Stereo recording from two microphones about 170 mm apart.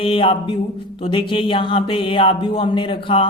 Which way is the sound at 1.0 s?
30° left (ahead or behind).